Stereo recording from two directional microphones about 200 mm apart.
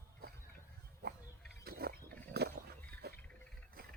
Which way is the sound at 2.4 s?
55° right (ahead or behind).